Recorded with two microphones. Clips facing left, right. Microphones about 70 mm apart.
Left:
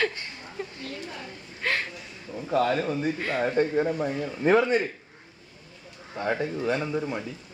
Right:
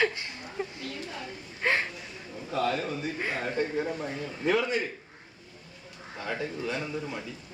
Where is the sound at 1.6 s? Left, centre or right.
Centre.